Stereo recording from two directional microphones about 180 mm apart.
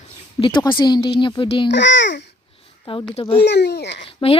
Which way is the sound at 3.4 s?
65° left (ahead or behind).